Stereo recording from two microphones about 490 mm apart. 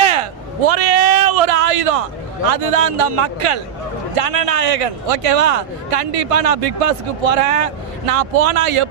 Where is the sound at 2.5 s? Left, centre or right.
Right.